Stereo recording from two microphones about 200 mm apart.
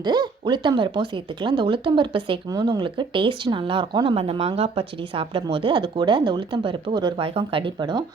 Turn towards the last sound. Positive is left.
turn(degrees=-20)  # may be behind; listen again after turning